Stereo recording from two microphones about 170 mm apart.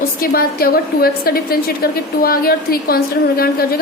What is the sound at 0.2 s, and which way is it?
A woman's voice, 60° left (ahead or behind).